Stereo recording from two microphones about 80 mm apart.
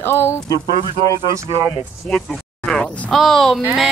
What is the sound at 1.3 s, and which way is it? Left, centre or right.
Speech, right.